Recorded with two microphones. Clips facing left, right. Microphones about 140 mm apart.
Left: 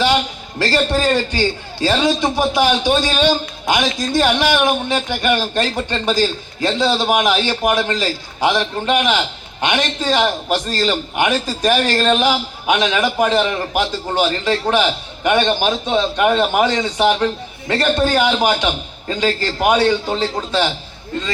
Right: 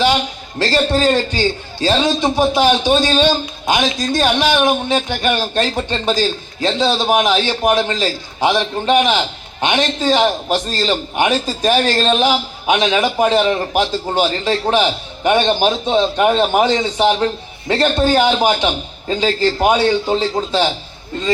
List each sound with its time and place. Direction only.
0.6 s a man's voice: 25° right (ahead or behind)